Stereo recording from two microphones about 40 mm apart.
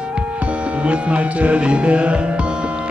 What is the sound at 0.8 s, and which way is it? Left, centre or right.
Music, right.